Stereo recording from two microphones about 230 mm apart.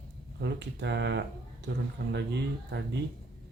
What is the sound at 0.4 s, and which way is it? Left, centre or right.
Speech, right.